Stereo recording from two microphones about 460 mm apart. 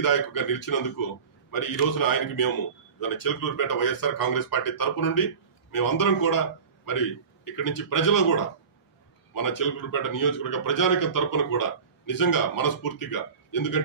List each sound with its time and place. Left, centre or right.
0.0 s a man's voice: left